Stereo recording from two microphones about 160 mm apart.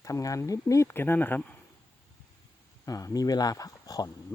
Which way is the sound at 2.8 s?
20° left (ahead or behind).